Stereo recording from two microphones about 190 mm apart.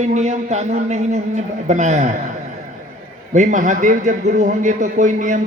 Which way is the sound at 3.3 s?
40° right (ahead or behind).